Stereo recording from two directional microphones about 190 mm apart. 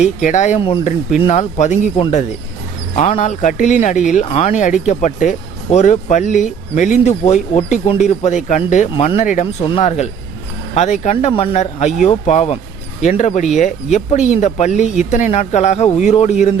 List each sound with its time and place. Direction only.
0.0 s speech: 40° left (ahead or behind)